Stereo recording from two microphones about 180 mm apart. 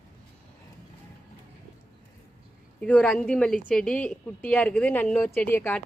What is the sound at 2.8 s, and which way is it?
A woman's voice, 5° left (ahead or behind).